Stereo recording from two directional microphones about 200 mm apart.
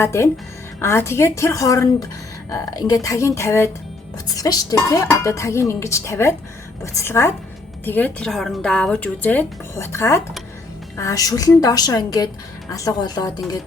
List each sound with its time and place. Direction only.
0.0 s speech: 15° left (ahead or behind)